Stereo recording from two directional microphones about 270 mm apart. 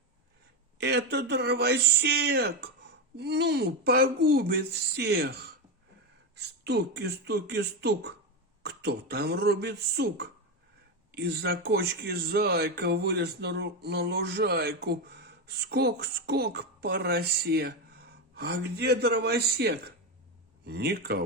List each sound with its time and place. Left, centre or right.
0.8 s speech: right